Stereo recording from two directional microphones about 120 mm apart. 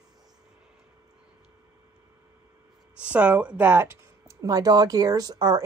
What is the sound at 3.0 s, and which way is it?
Speech, 10° right (ahead or behind).